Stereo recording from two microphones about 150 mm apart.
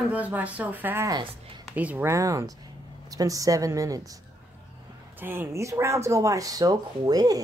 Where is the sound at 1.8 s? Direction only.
10° right (ahead or behind).